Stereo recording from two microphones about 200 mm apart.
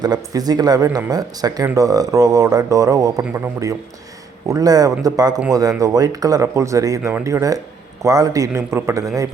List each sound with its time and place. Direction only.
0.0 s speech: 20° right (ahead or behind)